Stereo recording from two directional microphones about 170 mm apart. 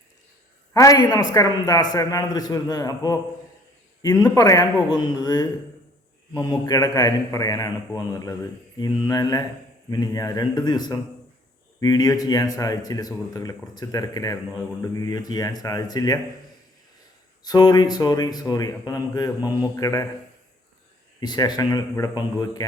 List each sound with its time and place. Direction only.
0.7 s a man's voice: 20° left (ahead or behind)
17.4 s a man's voice: 25° left (ahead or behind)
21.2 s a man's voice: 25° left (ahead or behind)